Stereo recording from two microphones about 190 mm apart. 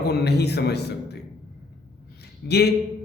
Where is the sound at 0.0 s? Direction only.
60° left (ahead or behind).